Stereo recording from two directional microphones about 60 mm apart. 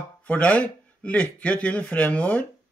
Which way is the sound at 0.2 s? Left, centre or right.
Left.